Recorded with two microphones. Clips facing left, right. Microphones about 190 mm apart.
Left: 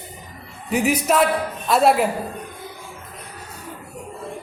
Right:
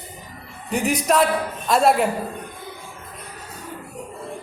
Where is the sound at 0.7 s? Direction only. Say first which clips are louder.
Left 1 dB; 5° left (ahead or behind).